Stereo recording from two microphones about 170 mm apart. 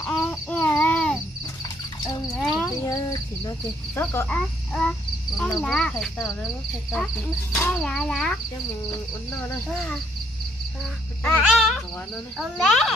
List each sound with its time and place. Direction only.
0.0 s a sound: centre (ahead or behind)
2.3 s cricket: centre (ahead or behind)
2.7 s a sound: 20° left (ahead or behind)
4.0 s speech: 10° left (ahead or behind)
7.5 s speech: 15° left (ahead or behind)
7.8 s speech: 5° left (ahead or behind)
11.2 s speech: centre (ahead or behind)